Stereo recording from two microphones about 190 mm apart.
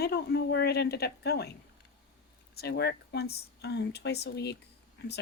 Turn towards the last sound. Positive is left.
turn(degrees=60)  # may be behind; listen again after turning